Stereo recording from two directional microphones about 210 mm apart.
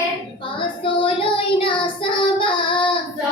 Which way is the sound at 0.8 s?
25° left (ahead or behind).